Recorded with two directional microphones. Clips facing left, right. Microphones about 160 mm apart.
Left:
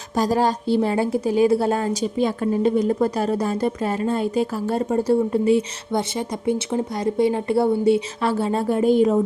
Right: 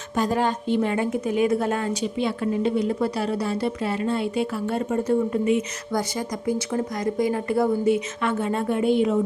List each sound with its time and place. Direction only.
0.2 s a woman's voice: 35° left (ahead or behind)